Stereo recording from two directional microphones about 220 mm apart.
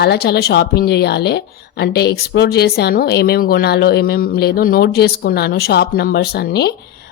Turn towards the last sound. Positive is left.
turn(degrees=45)  # may be behind; listen again after turning